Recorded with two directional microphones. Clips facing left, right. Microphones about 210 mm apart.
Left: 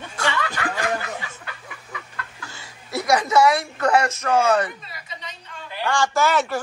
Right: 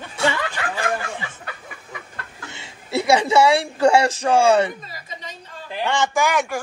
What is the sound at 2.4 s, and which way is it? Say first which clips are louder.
A woman's voice: right 3 dB; 25° right (ahead or behind).